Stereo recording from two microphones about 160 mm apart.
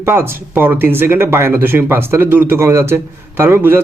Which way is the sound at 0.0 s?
15° right (ahead or behind).